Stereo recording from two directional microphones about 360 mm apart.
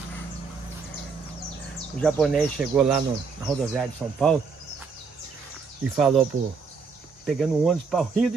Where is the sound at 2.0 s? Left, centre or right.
Centre.